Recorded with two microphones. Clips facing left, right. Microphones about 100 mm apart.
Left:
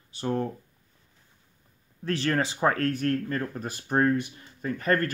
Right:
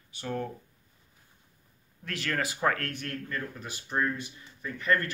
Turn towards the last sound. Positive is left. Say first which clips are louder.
# left 3 dB
turn(degrees=45)  # may be behind; listen again after turning